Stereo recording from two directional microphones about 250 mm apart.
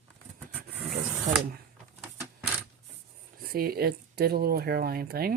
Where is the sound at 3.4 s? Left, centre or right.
Right.